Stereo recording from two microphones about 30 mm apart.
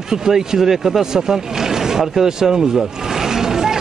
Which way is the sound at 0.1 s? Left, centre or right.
Centre.